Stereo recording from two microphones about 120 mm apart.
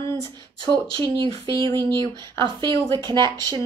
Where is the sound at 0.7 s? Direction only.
40° right (ahead or behind).